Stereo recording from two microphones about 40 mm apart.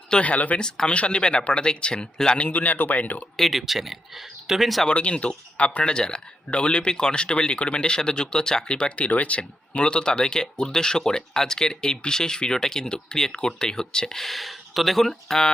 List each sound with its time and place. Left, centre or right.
0.1 s a man's voice: left
2.4 s a man's voice: left
3.3 s speech: centre
4.9 s speech: left
9.0 s speech: left; by 15.5 s centre